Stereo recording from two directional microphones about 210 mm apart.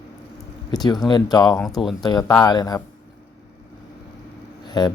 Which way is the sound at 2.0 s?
20° left (ahead or behind).